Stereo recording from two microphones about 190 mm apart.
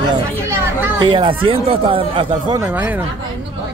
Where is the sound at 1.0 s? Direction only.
25° right (ahead or behind).